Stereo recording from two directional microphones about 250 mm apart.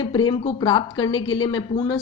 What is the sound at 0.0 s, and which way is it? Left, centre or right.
A woman's voice, centre.